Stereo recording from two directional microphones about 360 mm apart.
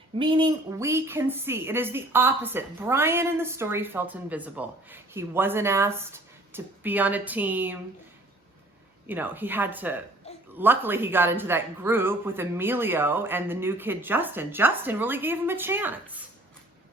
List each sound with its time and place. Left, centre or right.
0.2 s a woman's voice: centre
9.0 s speech: centre
10.3 s a sound: centre
10.6 s speech: centre